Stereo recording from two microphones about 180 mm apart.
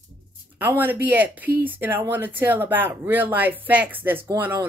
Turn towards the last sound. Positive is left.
turn(degrees=-15)  # may be behind; listen again after turning